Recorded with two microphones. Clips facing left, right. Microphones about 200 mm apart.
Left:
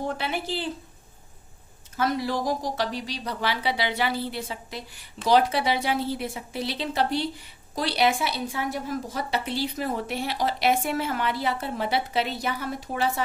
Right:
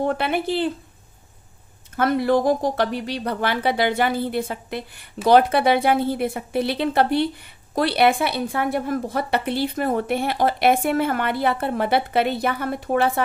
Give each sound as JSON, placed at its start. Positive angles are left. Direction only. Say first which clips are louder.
{"t": 0.0, "sound": "a woman's voice", "louder": "right 7 dB", "side_deg": -55}
{"t": 2.0, "sound": "a woman's voice", "louder": "right 7 dB", "side_deg": -55}